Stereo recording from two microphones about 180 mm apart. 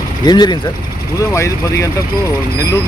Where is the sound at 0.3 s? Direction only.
25° left (ahead or behind).